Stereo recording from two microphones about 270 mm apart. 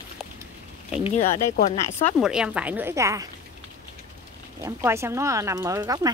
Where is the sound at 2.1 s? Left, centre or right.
Centre.